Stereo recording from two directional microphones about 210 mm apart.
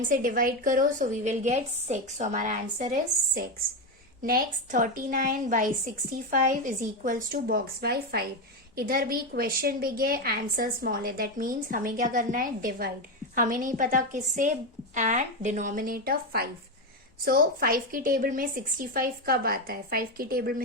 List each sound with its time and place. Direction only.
0.1 s a woman's voice: 40° right (ahead or behind)